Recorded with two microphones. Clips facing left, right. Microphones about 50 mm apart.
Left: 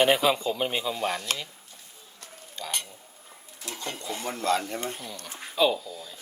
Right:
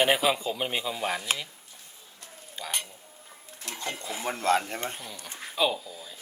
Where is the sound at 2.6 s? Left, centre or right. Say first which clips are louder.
Even; centre.